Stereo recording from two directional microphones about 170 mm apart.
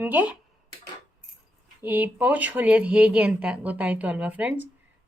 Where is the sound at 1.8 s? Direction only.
10° right (ahead or behind).